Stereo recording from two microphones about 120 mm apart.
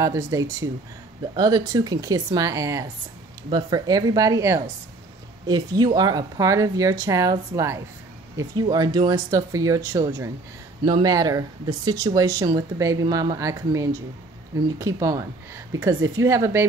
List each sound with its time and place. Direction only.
0.0 s speech: 25° right (ahead or behind)
8.6 s speech: 35° right (ahead or behind)